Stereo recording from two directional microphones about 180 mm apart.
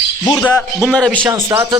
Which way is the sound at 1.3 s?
15° right (ahead or behind).